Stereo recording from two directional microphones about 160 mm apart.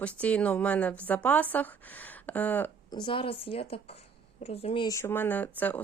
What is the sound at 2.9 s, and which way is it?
Speech, 30° left (ahead or behind).